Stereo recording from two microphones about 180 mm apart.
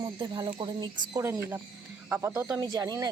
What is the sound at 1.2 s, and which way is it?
Speech, 15° right (ahead or behind).